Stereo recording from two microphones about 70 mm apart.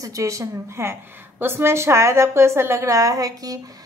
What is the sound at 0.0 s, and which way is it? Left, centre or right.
A woman's voice, right.